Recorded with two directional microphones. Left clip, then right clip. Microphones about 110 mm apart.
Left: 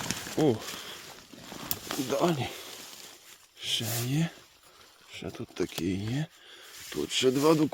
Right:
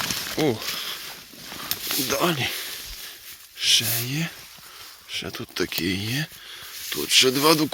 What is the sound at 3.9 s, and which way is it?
Speech, 45° left (ahead or behind).